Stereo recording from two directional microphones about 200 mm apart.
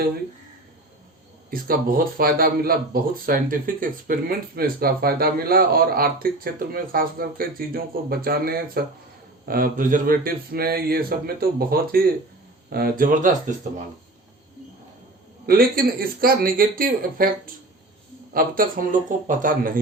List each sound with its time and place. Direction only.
1.5 s speech: 45° right (ahead or behind)
15.4 s speech: 45° right (ahead or behind)